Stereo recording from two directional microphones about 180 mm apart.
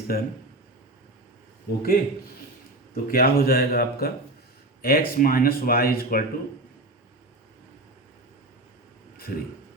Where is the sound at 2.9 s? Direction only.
55° left (ahead or behind).